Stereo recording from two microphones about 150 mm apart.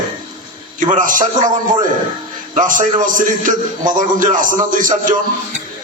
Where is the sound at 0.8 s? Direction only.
60° right (ahead or behind).